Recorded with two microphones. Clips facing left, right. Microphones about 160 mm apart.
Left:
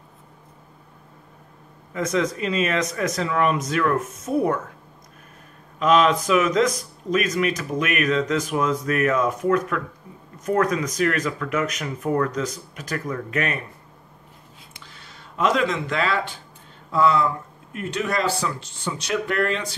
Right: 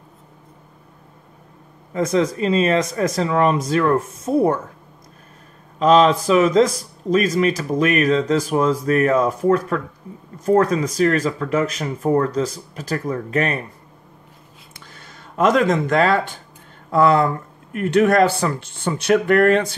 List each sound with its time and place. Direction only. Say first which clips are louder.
2.0 s speech: right 5 dB; 35° right (ahead or behind)
5.8 s speech: right 4 dB; 35° right (ahead or behind)
14.8 s a sound: right 4 dB; 45° right (ahead or behind)
16.9 s speech: right 4 dB; 55° right (ahead or behind)